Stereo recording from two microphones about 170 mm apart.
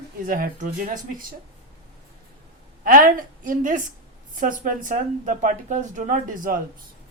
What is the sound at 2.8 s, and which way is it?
Speech, 50° right (ahead or behind).